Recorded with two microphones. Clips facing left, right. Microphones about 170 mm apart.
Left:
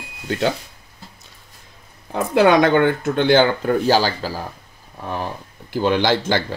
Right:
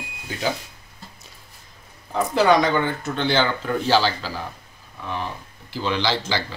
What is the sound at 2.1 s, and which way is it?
Speech, 60° left (ahead or behind).